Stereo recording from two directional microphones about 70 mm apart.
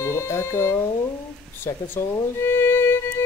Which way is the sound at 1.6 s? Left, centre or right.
Left.